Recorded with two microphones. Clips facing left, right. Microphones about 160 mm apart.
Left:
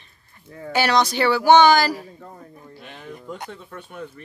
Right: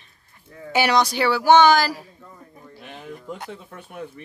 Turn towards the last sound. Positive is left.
turn(degrees=-5)  # may be behind; listen again after turning